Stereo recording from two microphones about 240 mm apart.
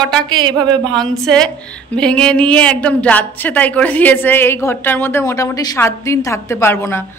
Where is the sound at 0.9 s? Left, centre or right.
Centre.